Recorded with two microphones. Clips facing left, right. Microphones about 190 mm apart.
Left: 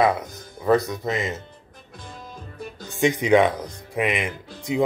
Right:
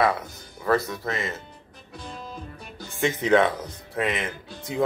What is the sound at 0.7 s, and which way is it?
Speech, 20° left (ahead or behind).